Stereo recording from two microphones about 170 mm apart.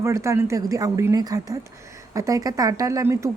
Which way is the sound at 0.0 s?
15° right (ahead or behind).